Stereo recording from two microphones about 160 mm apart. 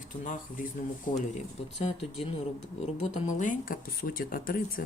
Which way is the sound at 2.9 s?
45° left (ahead or behind).